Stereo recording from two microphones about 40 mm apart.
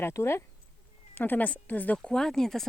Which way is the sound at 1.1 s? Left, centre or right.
Left.